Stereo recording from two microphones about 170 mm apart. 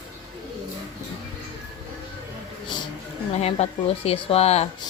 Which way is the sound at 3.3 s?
40° left (ahead or behind).